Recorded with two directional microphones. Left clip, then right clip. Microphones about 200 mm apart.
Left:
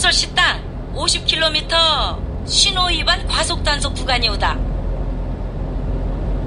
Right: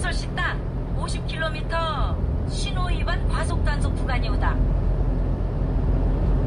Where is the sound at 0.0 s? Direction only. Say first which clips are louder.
Left 13 dB; 50° left (ahead or behind).